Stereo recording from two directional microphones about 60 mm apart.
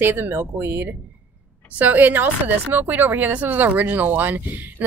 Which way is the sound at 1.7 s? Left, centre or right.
Right.